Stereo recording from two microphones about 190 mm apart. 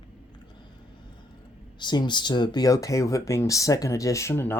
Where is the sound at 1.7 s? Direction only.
25° left (ahead or behind).